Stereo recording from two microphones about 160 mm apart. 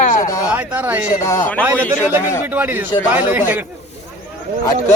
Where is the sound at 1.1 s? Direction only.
15° left (ahead or behind).